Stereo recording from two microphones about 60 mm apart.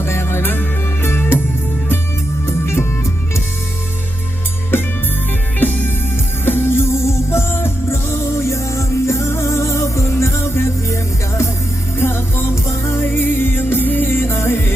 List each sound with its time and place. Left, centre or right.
0.0 s music: left
2.5 s music: left
4.7 s music: left
11.9 s music: left